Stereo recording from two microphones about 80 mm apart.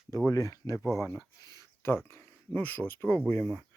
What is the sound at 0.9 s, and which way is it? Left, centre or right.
Speech, left.